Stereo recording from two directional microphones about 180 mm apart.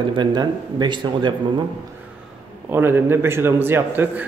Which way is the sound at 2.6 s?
10° right (ahead or behind).